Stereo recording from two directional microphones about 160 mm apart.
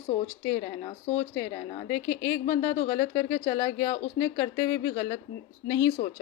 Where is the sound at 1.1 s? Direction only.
15° left (ahead or behind).